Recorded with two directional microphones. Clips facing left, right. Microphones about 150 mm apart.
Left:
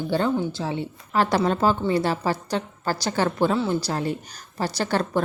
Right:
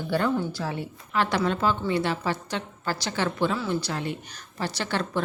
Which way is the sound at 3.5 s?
30° left (ahead or behind).